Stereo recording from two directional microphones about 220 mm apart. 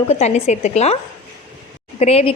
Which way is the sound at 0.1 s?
30° left (ahead or behind).